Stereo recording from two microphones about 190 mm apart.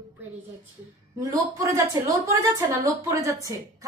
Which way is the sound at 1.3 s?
15° right (ahead or behind).